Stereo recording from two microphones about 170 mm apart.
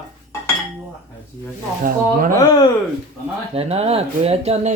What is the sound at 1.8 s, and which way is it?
Speech, 55° right (ahead or behind).